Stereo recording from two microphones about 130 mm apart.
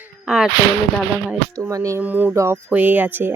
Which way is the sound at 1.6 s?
25° right (ahead or behind).